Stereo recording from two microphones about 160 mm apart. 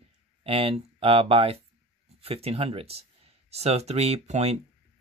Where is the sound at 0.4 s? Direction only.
35° right (ahead or behind).